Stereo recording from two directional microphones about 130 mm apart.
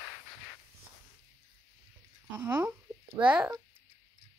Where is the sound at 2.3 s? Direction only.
20° right (ahead or behind).